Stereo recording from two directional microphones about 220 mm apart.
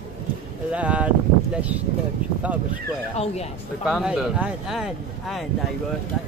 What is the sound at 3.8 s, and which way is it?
Speech, 5° right (ahead or behind).